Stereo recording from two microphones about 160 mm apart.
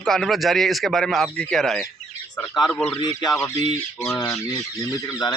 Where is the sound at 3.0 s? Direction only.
25° left (ahead or behind).